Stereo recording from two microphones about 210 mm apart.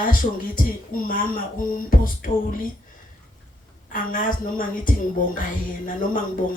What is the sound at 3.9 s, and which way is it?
A woman's voice, 40° left (ahead or behind).